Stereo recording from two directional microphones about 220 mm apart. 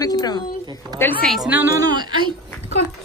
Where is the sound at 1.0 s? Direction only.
5° left (ahead or behind).